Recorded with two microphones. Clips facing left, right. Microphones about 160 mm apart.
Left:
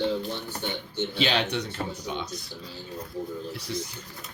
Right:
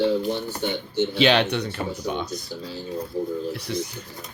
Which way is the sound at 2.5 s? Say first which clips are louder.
Right 7 dB; 75° right (ahead or behind).